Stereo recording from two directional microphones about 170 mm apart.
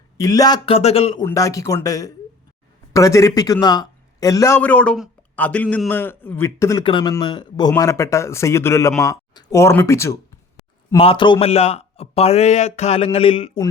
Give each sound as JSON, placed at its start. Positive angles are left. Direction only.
{"t": 0.2, "sound": "speech", "side_deg": 20}
{"t": 0.7, "sound": "a man's voice", "side_deg": 40}
{"t": 1.2, "sound": "a man's voice", "side_deg": 20}
{"t": 10.9, "sound": "a man's voice", "side_deg": 30}